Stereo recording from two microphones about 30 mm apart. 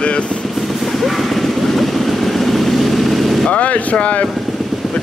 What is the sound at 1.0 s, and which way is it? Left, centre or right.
Vehicle, centre.